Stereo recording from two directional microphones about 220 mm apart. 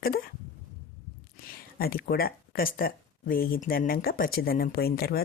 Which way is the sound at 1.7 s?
45° left (ahead or behind).